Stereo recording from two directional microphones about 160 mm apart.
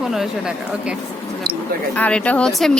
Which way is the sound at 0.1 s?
5° right (ahead or behind).